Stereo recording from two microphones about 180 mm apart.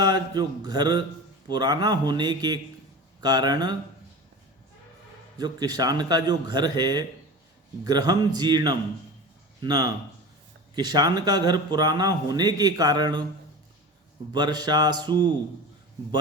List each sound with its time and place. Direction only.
0.0 s a man's voice: 25° right (ahead or behind)
5.4 s a man's voice: 20° right (ahead or behind)
14.3 s a man's voice: 25° right (ahead or behind)